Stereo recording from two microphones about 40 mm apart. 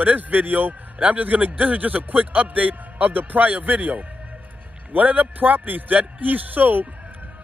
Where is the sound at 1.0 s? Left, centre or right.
Right.